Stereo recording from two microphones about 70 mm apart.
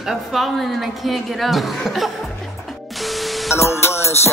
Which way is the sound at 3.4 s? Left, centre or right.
Left.